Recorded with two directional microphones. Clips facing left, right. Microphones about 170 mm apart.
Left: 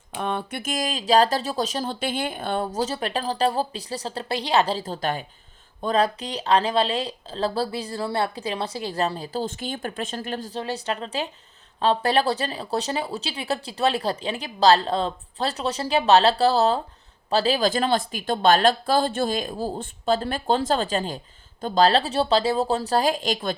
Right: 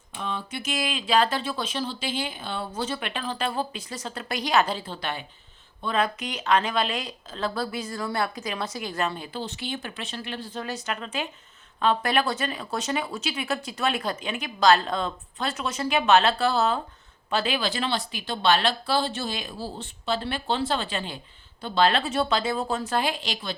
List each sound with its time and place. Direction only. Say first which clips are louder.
0.1 s speech: left 5 dB; 55° left (ahead or behind)
10.6 s speech: left 3 dB; 30° left (ahead or behind); by 23.6 s 50° left (ahead or behind)